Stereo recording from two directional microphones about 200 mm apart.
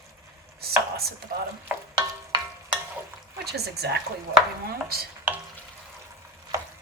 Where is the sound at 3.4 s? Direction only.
55° right (ahead or behind).